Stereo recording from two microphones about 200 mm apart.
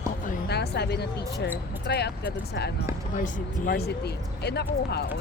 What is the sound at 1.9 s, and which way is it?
Speech, 55° left (ahead or behind).